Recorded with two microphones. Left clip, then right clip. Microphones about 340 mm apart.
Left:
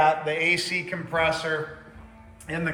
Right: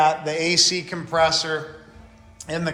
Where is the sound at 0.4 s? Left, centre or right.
Centre.